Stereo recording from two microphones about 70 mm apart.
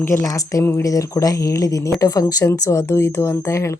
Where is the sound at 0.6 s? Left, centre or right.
Left.